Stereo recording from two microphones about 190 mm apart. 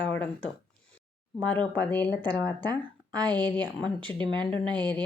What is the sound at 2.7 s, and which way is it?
Speech, 20° right (ahead or behind).